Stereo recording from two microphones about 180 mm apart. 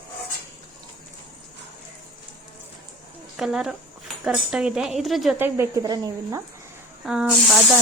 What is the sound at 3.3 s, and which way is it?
Speech, 5° right (ahead or behind).